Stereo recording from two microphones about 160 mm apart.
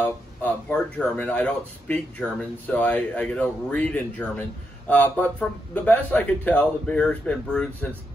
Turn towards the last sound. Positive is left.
turn(degrees=10)  # may be behind; listen again after turning